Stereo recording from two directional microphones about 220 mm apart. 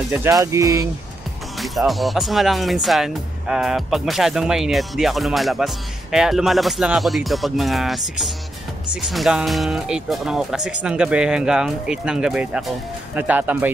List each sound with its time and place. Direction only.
0.1 s speech: 15° right (ahead or behind)
1.6 s speech: centre (ahead or behind)